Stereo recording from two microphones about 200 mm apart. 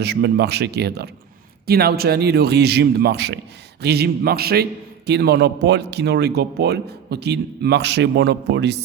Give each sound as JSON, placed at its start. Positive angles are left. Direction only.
{"t": 0.0, "sound": "speech", "side_deg": -55}